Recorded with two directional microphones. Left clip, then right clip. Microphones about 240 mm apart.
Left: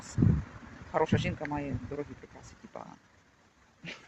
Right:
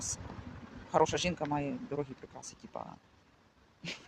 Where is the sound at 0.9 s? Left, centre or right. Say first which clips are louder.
Right 1 dB; centre.